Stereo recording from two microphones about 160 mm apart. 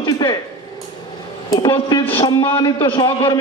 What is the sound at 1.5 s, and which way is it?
A woman's voice, 25° left (ahead or behind).